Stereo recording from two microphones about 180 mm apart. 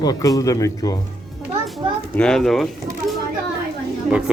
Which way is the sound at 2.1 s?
5° left (ahead or behind).